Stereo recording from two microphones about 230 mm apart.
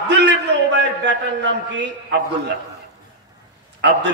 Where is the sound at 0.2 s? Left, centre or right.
Right.